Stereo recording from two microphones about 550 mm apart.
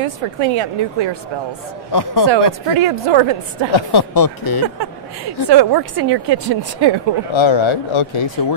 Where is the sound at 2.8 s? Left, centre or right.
Right.